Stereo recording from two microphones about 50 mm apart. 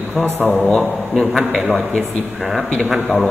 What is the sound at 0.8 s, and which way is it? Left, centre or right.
A man's voice, centre.